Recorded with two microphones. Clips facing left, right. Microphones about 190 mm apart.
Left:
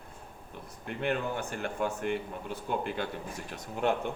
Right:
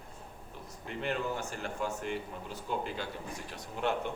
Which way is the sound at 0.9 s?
60° left (ahead or behind).